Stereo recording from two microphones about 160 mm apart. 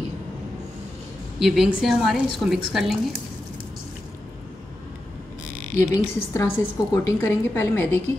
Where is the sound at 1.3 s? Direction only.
Centre (ahead or behind).